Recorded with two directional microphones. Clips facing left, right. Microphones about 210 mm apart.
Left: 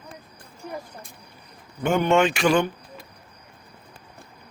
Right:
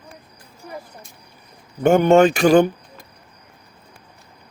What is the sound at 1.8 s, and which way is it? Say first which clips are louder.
Speech: right 7 dB; 45° right (ahead or behind).